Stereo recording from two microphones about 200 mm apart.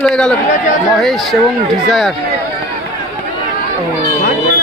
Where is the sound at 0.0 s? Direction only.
5° left (ahead or behind).